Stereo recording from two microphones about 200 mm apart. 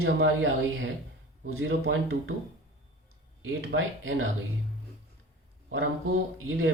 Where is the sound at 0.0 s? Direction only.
70° right (ahead or behind).